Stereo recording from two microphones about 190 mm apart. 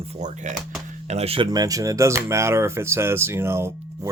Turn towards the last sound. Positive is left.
turn(degrees=-15)  # may be behind; listen again after turning